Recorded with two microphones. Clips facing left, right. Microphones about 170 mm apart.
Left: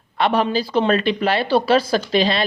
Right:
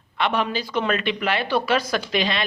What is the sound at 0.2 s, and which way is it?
A man's voice, 35° left (ahead or behind).